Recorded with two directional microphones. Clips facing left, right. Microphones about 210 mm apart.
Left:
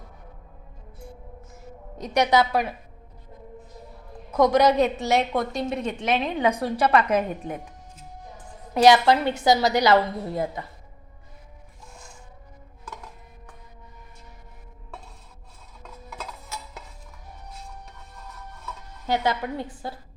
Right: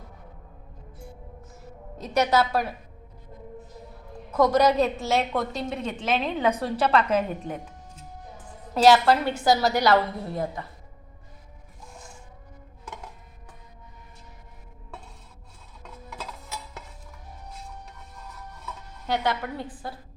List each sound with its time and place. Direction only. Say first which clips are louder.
2.0 s a woman's voice: left 2 dB; 15° left (ahead or behind)
4.3 s a woman's voice: left 2 dB; 15° left (ahead or behind)
8.7 s a woman's voice: left 1 dB; 15° left (ahead or behind)
19.1 s a woman's voice: left 2 dB; 25° left (ahead or behind)